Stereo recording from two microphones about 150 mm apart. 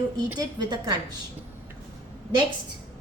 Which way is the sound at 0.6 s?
30° right (ahead or behind).